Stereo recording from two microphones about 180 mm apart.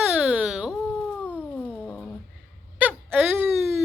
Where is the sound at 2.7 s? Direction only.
10° right (ahead or behind).